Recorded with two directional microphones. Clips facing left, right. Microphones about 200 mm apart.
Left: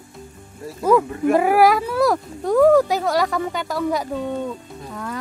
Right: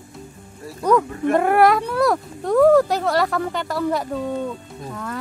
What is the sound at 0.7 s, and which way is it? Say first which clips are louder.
Speech: left 1 dB; 5° left (ahead or behind).